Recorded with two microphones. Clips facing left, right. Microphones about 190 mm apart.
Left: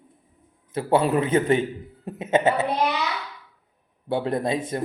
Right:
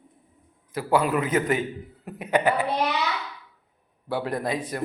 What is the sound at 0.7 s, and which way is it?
A woman's voice, 25° left (ahead or behind).